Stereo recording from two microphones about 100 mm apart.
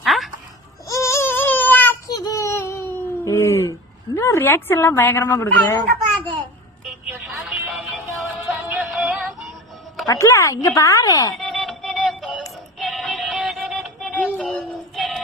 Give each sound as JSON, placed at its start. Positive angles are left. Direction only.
{"t": 0.0, "sound": "a sound", "side_deg": 0}
{"t": 0.9, "sound": "baby cry", "side_deg": 30}
{"t": 2.0, "sound": "a sound", "side_deg": 35}
{"t": 7.1, "sound": "music", "side_deg": -15}
{"t": 10.1, "sound": "a woman's voice", "side_deg": 30}
{"t": 11.3, "sound": "synthetic singing", "side_deg": 0}
{"t": 14.3, "sound": "music", "side_deg": 5}